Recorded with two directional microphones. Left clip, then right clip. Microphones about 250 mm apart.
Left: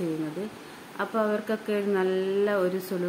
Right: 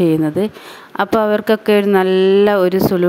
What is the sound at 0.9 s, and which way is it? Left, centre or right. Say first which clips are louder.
A woman's voice: right 13 dB; right.